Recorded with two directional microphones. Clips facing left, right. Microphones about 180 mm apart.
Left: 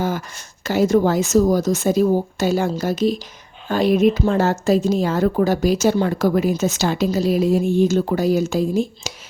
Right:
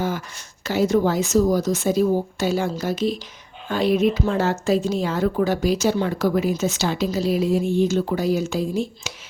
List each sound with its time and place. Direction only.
0.0 s a woman's voice: 45° left (ahead or behind)